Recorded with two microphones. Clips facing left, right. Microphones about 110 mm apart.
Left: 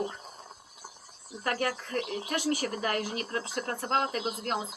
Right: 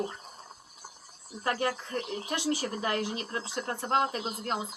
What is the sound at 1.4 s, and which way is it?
Speech, 25° right (ahead or behind).